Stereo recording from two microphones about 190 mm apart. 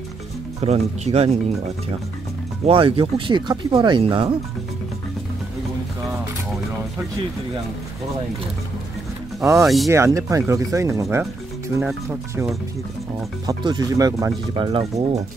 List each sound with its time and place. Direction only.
0.6 s speech: 35° right (ahead or behind)
2.6 s speech: 30° right (ahead or behind)
9.4 s speech: 15° right (ahead or behind)
13.5 s speech: 20° right (ahead or behind)